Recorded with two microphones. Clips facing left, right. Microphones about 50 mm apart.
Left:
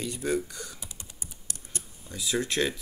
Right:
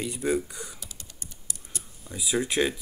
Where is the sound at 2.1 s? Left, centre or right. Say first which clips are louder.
Right 2 dB; centre.